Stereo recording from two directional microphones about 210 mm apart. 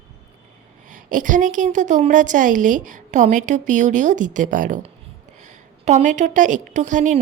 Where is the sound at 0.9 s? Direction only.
40° right (ahead or behind).